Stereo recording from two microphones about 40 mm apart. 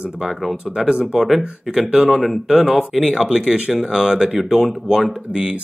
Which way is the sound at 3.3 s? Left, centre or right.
Right.